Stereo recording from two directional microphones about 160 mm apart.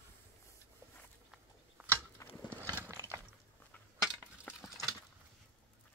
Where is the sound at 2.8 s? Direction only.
15° right (ahead or behind).